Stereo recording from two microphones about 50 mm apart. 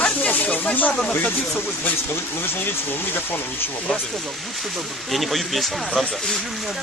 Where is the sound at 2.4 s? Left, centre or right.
Left.